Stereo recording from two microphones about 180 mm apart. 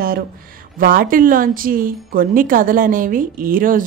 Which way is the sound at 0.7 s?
50° right (ahead or behind).